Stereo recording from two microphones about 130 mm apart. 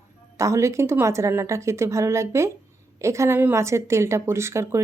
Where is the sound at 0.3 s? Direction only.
25° right (ahead or behind).